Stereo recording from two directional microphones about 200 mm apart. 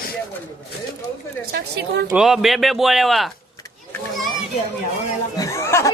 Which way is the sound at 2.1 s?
Centre (ahead or behind).